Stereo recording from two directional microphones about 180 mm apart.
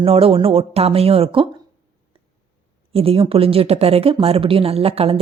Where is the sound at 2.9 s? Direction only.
30° right (ahead or behind).